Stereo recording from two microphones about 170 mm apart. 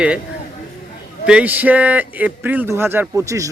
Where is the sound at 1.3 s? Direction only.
10° right (ahead or behind).